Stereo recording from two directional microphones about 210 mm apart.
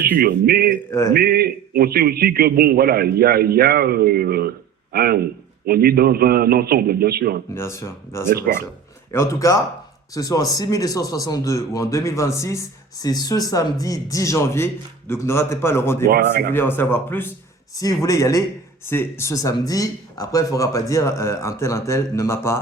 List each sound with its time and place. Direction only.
0.2 s a man's voice: 45° right (ahead or behind)
0.9 s a man's voice: 15° left (ahead or behind)
1.1 s a man's voice: 45° right (ahead or behind)
7.5 s a man's voice: 15° left (ahead or behind)
16.0 s a man's voice: 50° right (ahead or behind)
16.5 s a man's voice: 10° left (ahead or behind)